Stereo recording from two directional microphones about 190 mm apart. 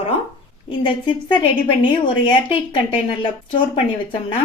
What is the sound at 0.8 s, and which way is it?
A woman's voice, 25° left (ahead or behind).